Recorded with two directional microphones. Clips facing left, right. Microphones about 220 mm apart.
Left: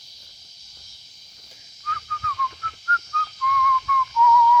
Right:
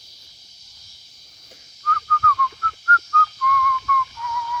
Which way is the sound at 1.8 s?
55° right (ahead or behind).